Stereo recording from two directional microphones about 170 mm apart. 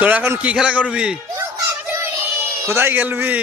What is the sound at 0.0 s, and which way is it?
A man's voice, 10° right (ahead or behind).